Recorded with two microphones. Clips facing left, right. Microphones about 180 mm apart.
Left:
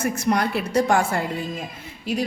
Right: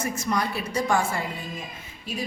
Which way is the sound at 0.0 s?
65° left (ahead or behind).